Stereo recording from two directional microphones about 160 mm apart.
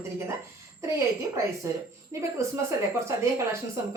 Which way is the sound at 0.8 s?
15° right (ahead or behind).